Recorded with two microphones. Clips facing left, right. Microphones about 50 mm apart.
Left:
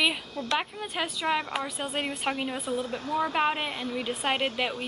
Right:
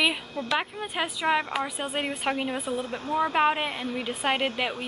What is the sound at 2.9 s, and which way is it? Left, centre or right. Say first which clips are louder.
Speech: right 2 dB; right.